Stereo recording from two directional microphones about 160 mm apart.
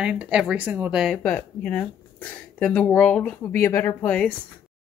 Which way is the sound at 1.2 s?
5° left (ahead or behind).